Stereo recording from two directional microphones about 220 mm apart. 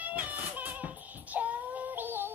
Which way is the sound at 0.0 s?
5° right (ahead or behind).